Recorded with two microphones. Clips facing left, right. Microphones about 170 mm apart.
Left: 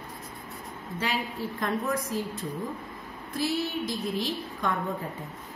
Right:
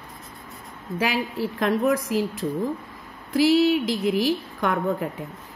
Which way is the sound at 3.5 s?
85° right.